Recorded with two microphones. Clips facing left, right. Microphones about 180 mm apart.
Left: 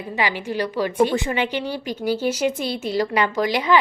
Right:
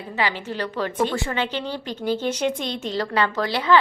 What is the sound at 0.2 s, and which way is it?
A woman's voice, 15° left (ahead or behind).